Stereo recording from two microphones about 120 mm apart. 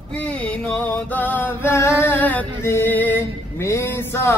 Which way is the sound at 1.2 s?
15° left (ahead or behind).